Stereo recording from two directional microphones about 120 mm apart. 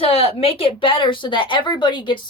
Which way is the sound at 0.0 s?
55° left (ahead or behind).